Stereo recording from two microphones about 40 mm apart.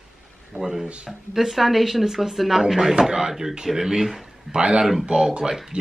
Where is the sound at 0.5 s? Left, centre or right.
Centre.